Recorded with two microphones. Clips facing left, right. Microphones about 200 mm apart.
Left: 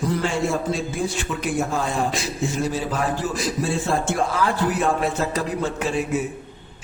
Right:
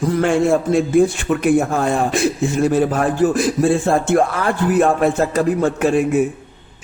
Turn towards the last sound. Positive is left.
turn(degrees=-50)  # may be behind; listen again after turning